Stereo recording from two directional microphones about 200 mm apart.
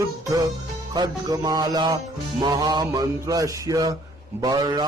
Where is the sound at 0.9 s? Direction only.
20° right (ahead or behind).